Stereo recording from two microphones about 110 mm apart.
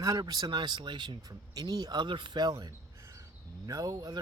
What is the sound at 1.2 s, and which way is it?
Speech, 35° right (ahead or behind).